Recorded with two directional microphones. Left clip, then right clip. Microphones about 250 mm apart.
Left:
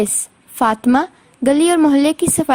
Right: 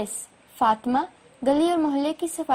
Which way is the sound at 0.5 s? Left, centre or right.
Left.